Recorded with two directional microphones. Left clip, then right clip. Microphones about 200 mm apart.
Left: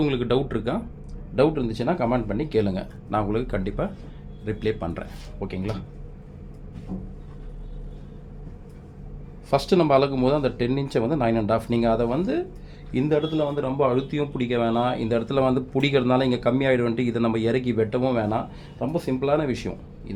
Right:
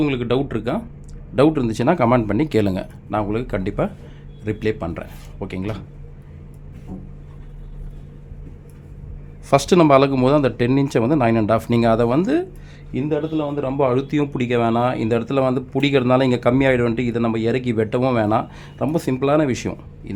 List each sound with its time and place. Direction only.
0.0 s speech: 20° right (ahead or behind)
1.4 s speech: 40° right (ahead or behind)
3.1 s speech: 15° right (ahead or behind)
9.5 s speech: 40° right (ahead or behind)
12.9 s speech: 10° right (ahead or behind)
13.7 s speech: 35° right (ahead or behind)